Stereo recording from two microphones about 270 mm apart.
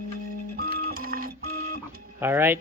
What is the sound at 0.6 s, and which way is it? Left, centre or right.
Printer, right.